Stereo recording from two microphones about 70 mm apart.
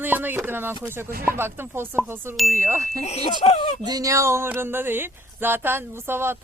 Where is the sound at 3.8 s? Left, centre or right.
Right.